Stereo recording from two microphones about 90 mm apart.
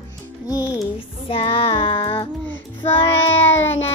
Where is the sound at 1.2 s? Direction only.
90° left; by 2.3 s 70° left (ahead or behind).